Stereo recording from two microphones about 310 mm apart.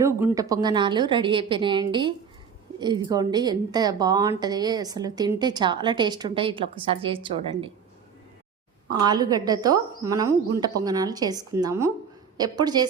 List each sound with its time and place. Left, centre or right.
0.0 s a woman's voice: centre
8.9 s a woman's voice: centre